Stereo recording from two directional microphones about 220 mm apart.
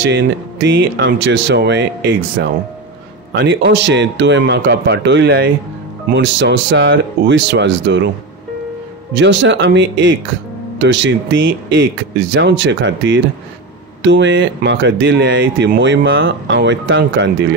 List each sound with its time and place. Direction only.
0.1 s speech: 55° right (ahead or behind)
9.1 s speech: 55° right (ahead or behind)